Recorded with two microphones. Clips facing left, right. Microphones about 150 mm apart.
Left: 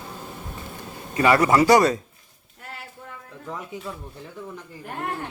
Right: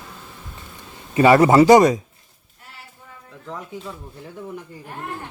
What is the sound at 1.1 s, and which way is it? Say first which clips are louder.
Speech: right 5 dB; 25° right (ahead or behind).